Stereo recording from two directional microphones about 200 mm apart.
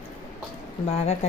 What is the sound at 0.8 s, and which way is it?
Speech, 30° left (ahead or behind).